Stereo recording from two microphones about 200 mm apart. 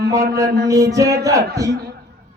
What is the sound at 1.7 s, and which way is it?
Speech, 50° right (ahead or behind).